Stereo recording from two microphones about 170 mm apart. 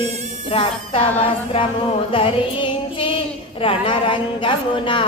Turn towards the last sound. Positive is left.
turn(degrees=30)  # may be behind; listen again after turning